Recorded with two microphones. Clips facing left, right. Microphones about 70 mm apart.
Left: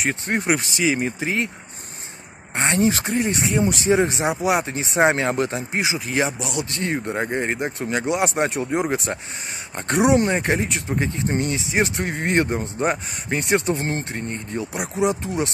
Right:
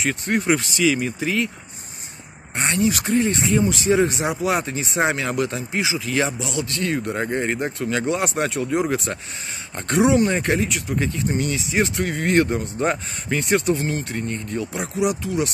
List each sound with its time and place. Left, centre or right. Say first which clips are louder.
0.0 s speech: right 1 dB; left
2.5 s speech: left 1 dB; left
3.2 s speech: right 5 dB; left
13.8 s speech: right 1 dB; left